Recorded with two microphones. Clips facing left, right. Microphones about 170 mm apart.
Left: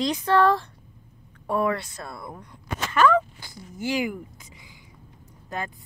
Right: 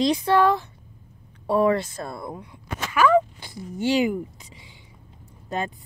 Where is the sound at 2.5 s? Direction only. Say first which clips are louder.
Left 1 dB; 5° right (ahead or behind).